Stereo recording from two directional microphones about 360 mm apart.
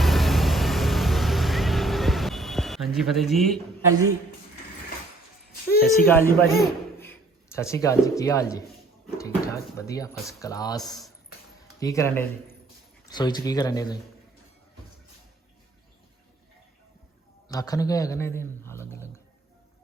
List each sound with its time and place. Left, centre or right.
0.0 s vehicle: centre
6.1 s a man's voice: centre
17.5 s speech: centre